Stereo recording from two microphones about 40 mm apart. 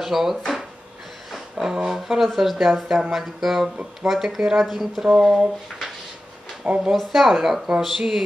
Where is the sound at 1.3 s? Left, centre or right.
Centre.